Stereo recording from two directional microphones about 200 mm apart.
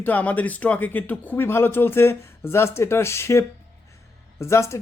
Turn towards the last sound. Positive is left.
turn(degrees=15)  # may be behind; listen again after turning